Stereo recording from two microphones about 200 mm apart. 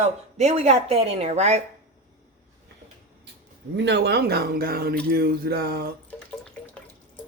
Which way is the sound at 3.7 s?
60° right (ahead or behind).